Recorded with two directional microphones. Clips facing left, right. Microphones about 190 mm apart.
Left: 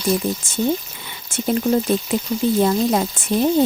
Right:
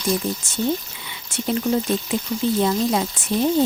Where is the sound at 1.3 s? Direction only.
50° left (ahead or behind).